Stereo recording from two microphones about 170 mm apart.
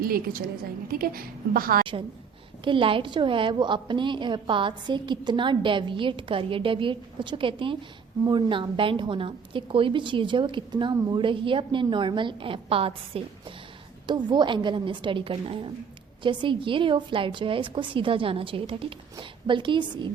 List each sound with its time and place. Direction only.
0.0 s a woman's voice: 60° right (ahead or behind)
1.8 s a woman's voice: 30° right (ahead or behind)